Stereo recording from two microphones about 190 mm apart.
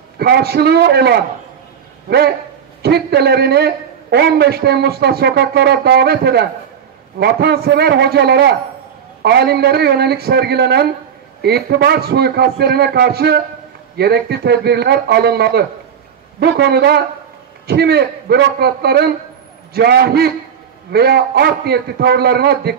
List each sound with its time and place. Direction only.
0.2 s a man's voice: 55° right (ahead or behind)